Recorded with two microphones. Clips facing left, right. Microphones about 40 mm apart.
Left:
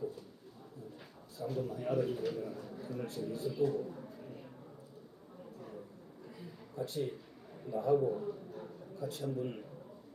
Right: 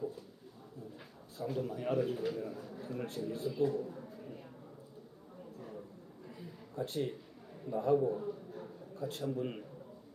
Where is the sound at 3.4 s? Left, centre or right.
Centre.